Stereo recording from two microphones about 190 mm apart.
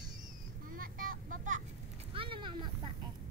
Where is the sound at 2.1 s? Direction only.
25° right (ahead or behind).